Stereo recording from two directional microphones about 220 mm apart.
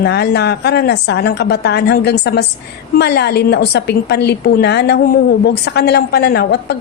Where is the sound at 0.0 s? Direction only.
50° left (ahead or behind).